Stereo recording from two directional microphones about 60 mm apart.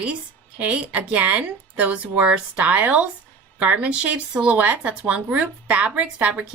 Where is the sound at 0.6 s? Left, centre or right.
Right.